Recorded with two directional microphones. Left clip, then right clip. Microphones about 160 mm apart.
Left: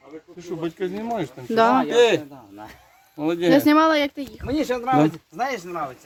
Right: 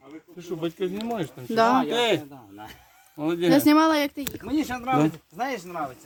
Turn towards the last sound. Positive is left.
turn(degrees=30)  # may be behind; listen again after turning